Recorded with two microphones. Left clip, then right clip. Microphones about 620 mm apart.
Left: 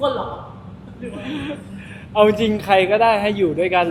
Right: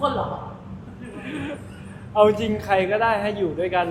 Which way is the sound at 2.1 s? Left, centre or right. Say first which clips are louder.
Left 2 dB; centre.